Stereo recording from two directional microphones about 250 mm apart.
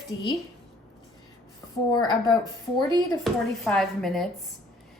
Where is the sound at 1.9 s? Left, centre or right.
Centre.